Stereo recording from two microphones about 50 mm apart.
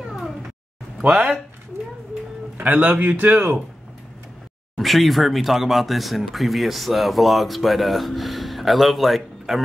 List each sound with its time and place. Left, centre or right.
0.9 s speech: centre
2.5 s a man's voice: right
4.7 s speech: centre